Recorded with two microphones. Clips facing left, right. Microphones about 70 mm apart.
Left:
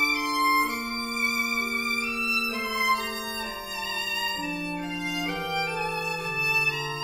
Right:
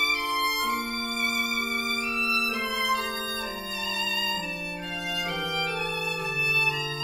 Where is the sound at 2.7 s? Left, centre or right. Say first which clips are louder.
Left 4 dB; centre.